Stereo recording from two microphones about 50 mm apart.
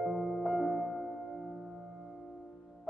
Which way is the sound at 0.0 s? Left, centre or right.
Centre.